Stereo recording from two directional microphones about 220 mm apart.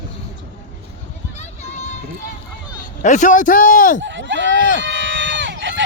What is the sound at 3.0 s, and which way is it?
Speech, 35° left (ahead or behind).